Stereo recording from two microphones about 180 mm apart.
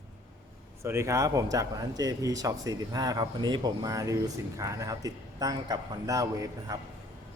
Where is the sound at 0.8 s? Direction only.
15° right (ahead or behind).